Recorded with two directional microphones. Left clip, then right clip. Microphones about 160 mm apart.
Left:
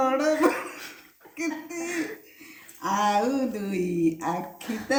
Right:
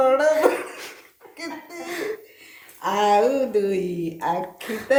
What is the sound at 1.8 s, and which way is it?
Cough, 25° right (ahead or behind).